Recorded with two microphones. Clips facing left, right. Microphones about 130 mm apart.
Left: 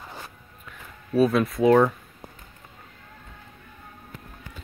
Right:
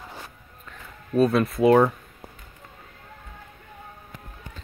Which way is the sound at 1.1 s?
Centre (ahead or behind).